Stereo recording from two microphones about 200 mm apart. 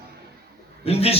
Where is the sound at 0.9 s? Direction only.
30° left (ahead or behind).